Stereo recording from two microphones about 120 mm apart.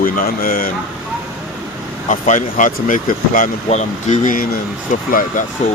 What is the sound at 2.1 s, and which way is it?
Speech, 90° left.